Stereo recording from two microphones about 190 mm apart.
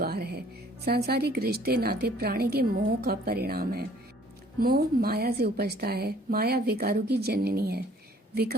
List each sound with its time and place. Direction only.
0.0 s music: 55° right (ahead or behind)
0.9 s a woman's voice: 55° right (ahead or behind)